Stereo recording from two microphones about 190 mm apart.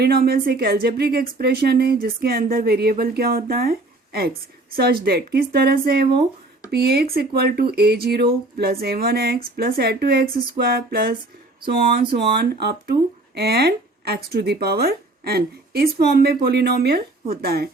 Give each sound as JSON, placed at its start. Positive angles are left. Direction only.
{"t": 0.0, "sound": "a woman's voice", "side_deg": -55}